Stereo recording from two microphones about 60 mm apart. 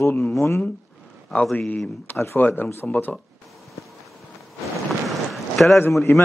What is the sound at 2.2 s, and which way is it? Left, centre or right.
Speech, left.